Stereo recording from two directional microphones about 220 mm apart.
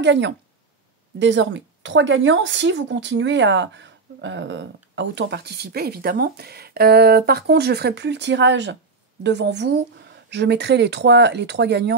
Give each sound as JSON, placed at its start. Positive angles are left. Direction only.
{"t": 0.0, "sound": "a woman's voice", "side_deg": -55}